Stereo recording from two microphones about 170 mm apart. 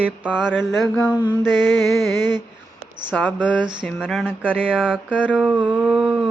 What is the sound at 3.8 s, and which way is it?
Speech, 5° left (ahead or behind).